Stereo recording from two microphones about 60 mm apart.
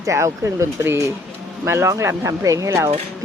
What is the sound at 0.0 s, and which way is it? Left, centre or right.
Speech, right.